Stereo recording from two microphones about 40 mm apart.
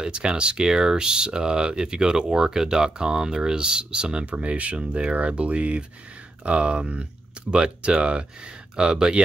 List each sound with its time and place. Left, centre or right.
0.0 s speech: right
4.3 s speech: right